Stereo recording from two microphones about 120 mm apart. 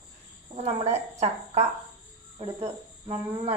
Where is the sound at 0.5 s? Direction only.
65° right (ahead or behind).